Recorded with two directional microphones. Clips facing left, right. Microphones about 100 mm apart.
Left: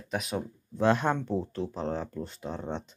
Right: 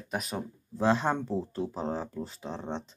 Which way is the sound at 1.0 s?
5° right (ahead or behind).